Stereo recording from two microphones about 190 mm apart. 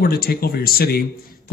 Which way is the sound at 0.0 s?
55° left (ahead or behind).